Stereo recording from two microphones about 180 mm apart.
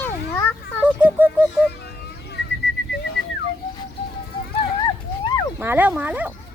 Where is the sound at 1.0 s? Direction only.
10° right (ahead or behind).